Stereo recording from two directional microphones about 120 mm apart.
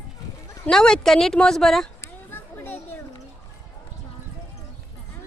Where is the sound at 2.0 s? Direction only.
20° left (ahead or behind).